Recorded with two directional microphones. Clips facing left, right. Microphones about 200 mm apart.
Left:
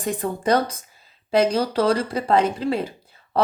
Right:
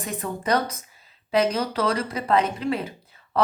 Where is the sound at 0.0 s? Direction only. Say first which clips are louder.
Left 5 dB; 30° left (ahead or behind).